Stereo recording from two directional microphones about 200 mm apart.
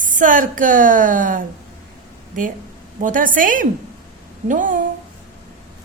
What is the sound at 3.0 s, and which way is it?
A woman's voice, 40° right (ahead or behind).